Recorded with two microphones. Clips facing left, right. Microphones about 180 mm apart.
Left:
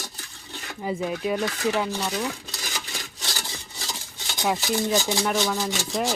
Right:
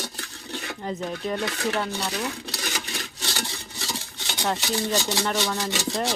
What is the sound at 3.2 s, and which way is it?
Wood, 65° right (ahead or behind).